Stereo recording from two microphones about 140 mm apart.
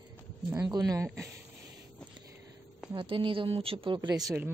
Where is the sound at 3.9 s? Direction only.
25° right (ahead or behind).